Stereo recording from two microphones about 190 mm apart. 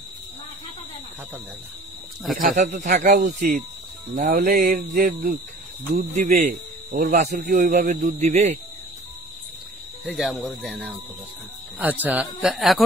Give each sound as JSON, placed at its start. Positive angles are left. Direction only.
{"t": 2.4, "sound": "a man's voice", "side_deg": -45}
{"t": 10.0, "sound": "speech", "side_deg": 0}